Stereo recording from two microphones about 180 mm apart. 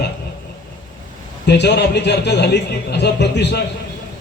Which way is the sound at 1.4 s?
65° left (ahead or behind).